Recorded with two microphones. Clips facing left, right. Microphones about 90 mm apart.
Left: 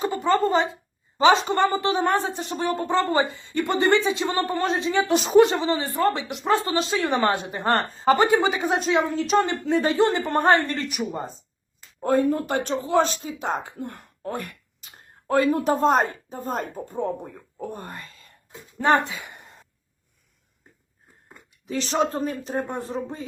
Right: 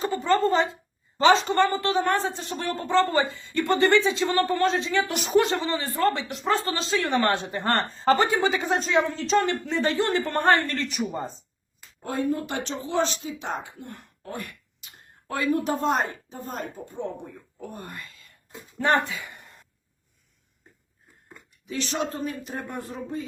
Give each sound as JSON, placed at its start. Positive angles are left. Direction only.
{"t": 0.0, "sound": "a woman's voice", "side_deg": 15}
{"t": 11.9, "sound": "speech", "side_deg": 50}
{"t": 17.7, "sound": "groan", "side_deg": 35}
{"t": 18.8, "sound": "a sound", "side_deg": 20}
{"t": 21.7, "sound": "speech", "side_deg": 35}